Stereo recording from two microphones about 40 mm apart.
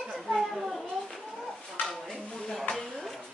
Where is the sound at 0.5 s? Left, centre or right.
Centre.